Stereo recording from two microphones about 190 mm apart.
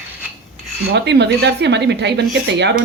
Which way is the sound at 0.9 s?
65° right (ahead or behind).